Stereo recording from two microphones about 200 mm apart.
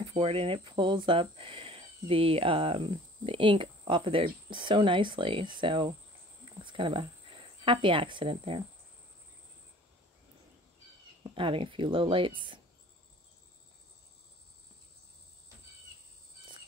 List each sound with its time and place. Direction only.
0.0 s speech: 25° right (ahead or behind)
6.4 s a sound: 25° right (ahead or behind)
11.2 s speech: 25° right (ahead or behind)